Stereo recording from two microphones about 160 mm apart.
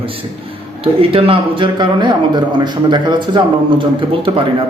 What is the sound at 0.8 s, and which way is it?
A man's voice, 35° right (ahead or behind).